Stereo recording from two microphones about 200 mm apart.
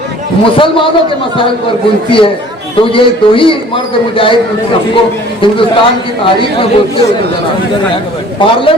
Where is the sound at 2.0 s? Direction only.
25° left (ahead or behind).